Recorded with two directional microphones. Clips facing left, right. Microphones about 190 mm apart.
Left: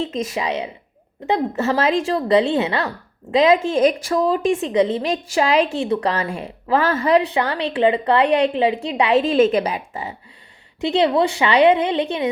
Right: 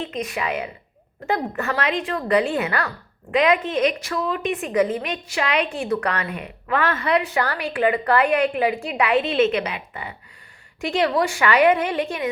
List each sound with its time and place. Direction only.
0.0 s a woman's voice: 25° left (ahead or behind)
7.3 s a woman's voice: 20° left (ahead or behind)